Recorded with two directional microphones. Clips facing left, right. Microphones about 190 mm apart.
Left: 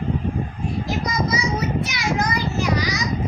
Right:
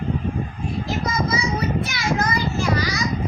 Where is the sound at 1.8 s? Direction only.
15° left (ahead or behind).